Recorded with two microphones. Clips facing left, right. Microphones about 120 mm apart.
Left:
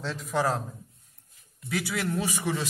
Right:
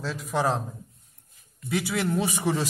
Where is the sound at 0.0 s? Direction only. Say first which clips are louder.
Right 2 dB; 5° right (ahead or behind).